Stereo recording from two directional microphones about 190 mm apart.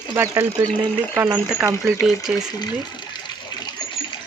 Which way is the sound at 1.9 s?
5° right (ahead or behind).